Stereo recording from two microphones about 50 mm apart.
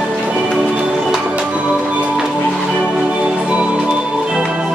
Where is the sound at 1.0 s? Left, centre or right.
Centre.